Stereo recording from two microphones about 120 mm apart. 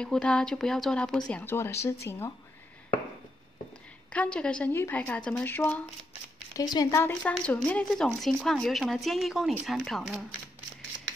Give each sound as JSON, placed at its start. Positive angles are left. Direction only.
{"t": 0.0, "sound": "speech", "side_deg": 10}
{"t": 1.3, "sound": "speech", "side_deg": 20}
{"t": 4.1, "sound": "a woman's voice", "side_deg": 10}
{"t": 6.5, "sound": "a woman's voice", "side_deg": 35}
{"t": 7.1, "sound": "speech", "side_deg": 15}